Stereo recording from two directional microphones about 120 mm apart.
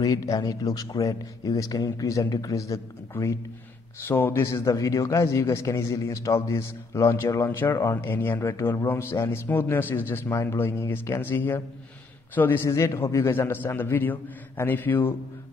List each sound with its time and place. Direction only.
0.0 s a man's voice: 30° left (ahead or behind)